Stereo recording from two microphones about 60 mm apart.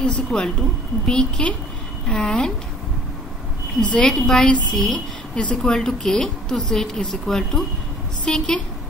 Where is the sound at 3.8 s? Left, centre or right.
Centre.